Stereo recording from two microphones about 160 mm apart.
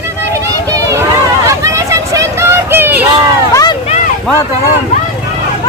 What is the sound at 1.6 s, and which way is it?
Vehicle, 20° right (ahead or behind).